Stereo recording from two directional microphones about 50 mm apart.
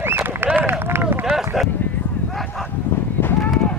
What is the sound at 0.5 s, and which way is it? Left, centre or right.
Run, right.